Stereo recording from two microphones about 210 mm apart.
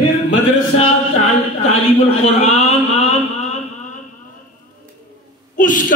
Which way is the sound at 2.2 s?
30° left (ahead or behind).